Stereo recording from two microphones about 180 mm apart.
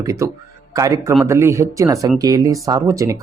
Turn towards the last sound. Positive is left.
turn(degrees=-20)  # may be behind; listen again after turning